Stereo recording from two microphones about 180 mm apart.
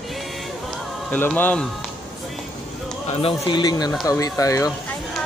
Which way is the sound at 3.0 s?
30° left (ahead or behind).